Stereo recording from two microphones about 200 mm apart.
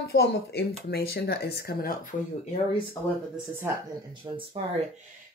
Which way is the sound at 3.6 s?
20° right (ahead or behind).